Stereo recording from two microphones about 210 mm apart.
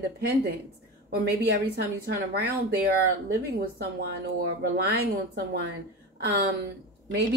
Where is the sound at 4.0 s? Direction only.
45° right (ahead or behind).